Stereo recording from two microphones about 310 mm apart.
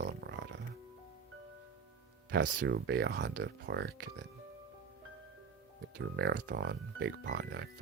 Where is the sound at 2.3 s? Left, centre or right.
Right.